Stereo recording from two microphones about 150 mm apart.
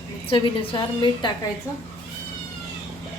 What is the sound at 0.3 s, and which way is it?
A woman's voice, 35° left (ahead or behind).